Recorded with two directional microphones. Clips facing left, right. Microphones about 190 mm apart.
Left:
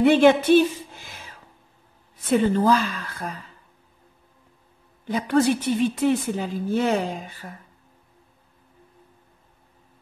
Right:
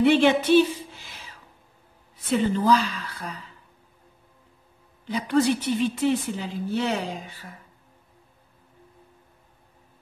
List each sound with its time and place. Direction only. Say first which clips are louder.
0.0 s a sound: left 3 dB; 50° left (ahead or behind)
2.3 s a woman's voice: left 2 dB; 50° left (ahead or behind)
5.0 s a woman's voice: left 2 dB; 50° left (ahead or behind)